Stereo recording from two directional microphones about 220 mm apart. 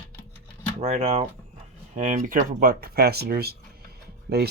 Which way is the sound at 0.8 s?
30° right (ahead or behind).